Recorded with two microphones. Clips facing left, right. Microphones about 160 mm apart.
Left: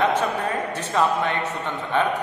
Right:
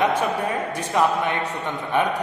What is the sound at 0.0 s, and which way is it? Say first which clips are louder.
A man's voice: even; 10° right (ahead or behind).